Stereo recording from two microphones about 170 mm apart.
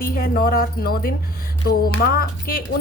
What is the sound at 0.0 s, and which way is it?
Speech, 60° left (ahead or behind).